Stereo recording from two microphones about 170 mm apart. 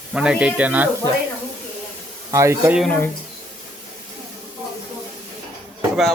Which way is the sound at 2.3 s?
15° right (ahead or behind).